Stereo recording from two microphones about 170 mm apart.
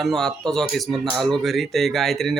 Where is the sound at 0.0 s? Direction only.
Centre (ahead or behind).